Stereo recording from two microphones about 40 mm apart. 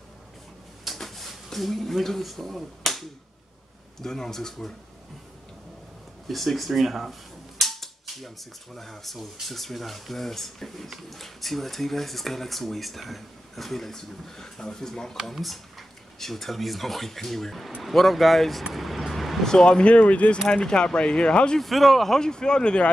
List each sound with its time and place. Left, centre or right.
0.9 s speech: centre
6.2 s speech: centre
15.3 s speech: centre
18.6 s vehicle: centre
19.4 s speech: centre
20.3 s speech: centre
21.5 s speech: centre
22.2 s speech: centre